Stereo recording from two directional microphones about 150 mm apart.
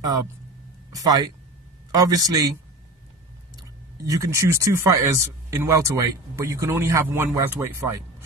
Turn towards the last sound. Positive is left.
turn(degrees=-20)  # may be behind; listen again after turning